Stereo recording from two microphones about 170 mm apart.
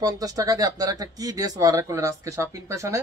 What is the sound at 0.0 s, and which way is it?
Speech, 20° right (ahead or behind).